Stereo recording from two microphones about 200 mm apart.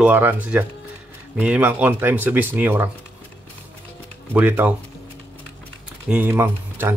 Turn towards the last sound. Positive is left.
turn(degrees=-10)  # may be behind; listen again after turning